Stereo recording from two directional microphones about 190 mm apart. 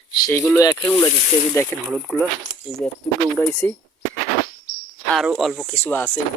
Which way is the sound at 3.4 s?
10° left (ahead or behind).